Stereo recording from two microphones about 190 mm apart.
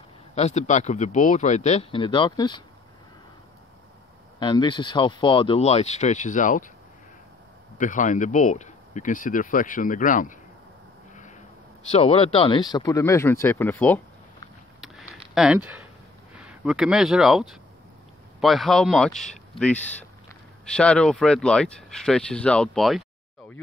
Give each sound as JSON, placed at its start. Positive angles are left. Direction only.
{"t": 0.3, "sound": "speech", "side_deg": 35}
{"t": 4.4, "sound": "speech", "side_deg": 25}
{"t": 7.7, "sound": "speech", "side_deg": 40}
{"t": 11.9, "sound": "speech", "side_deg": 35}
{"t": 15.3, "sound": "speech", "side_deg": -5}